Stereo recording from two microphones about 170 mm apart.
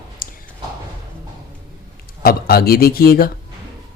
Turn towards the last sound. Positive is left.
turn(degrees=60)  # may be behind; listen again after turning